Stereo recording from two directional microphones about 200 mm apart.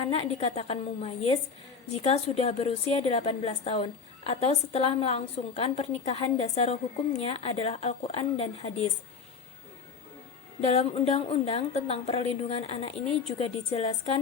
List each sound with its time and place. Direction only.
0.0 s a woman's voice: 25° left (ahead or behind)
10.7 s a woman's voice: 30° left (ahead or behind)